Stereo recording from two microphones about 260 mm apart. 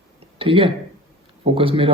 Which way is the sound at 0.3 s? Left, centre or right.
Centre.